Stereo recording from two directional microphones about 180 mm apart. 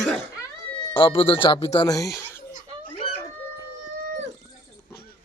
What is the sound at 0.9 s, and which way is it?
Speech, 30° left (ahead or behind).